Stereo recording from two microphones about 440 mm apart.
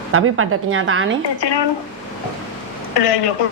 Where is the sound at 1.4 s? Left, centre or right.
Left.